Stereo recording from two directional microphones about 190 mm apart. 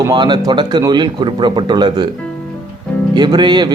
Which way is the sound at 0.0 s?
25° right (ahead or behind).